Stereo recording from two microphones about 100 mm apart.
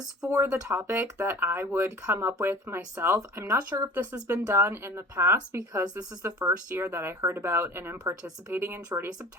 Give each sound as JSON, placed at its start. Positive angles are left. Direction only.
{"t": 0.2, "sound": "speech", "side_deg": -25}
{"t": 3.2, "sound": "speech", "side_deg": -35}
{"t": 3.9, "sound": "speech", "side_deg": -20}